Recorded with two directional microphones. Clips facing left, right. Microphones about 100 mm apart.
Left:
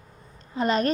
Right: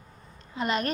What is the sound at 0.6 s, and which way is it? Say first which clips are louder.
Speech: left 5 dB; 35° left (ahead or behind).